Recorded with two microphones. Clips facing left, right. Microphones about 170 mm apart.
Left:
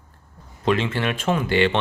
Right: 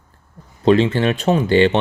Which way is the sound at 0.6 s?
40° right (ahead or behind).